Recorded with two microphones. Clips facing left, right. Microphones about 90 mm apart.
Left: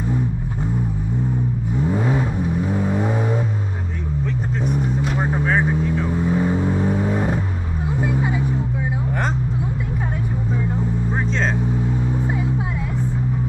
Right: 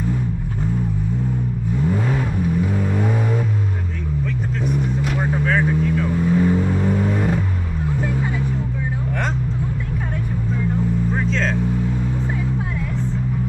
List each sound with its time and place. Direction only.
1.9 s vehicle: 20° left (ahead or behind)
5.1 s vehicle: 15° left (ahead or behind)
8.0 s music: 15° left (ahead or behind)